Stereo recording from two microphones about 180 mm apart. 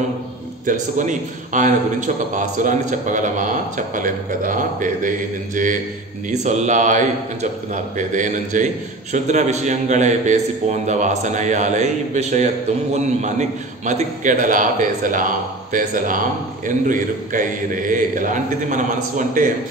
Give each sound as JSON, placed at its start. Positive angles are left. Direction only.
{"t": 0.7, "sound": "a man's voice", "side_deg": -45}